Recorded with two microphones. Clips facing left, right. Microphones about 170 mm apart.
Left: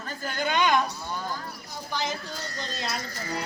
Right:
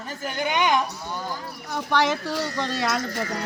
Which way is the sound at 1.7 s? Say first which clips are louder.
Right 9 dB; 75° right (ahead or behind).